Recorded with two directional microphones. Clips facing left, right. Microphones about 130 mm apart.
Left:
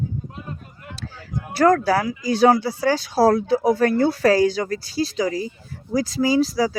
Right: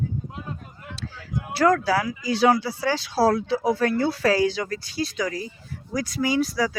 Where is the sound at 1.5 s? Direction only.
45° left (ahead or behind).